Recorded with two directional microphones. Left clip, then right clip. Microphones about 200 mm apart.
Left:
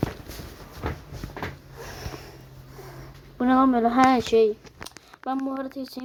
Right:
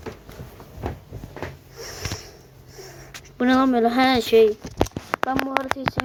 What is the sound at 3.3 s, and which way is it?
Speech, 10° right (ahead or behind).